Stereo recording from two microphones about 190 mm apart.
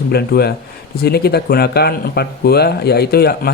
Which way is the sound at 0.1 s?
55° left (ahead or behind).